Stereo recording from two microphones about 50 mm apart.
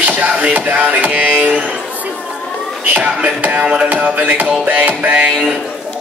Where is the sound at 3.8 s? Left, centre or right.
Right.